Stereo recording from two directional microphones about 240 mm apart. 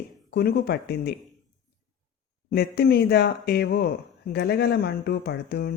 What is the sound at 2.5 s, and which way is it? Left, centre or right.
Speech, left.